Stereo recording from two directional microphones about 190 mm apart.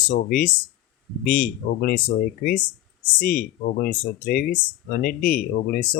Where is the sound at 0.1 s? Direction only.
50° left (ahead or behind).